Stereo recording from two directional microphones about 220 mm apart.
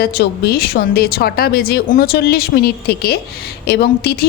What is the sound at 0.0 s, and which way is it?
A woman's voice, 45° left (ahead or behind).